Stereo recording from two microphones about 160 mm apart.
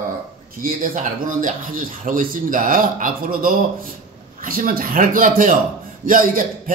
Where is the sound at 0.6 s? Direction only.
60° right (ahead or behind).